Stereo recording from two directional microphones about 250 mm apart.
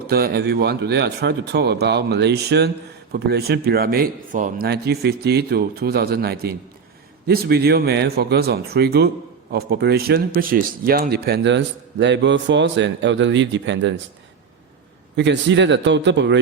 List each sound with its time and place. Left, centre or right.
0.1 s a man's voice: right
15.1 s a man's voice: right